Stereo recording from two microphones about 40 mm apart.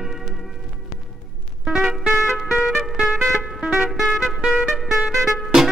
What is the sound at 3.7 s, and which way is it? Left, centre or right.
Music, centre.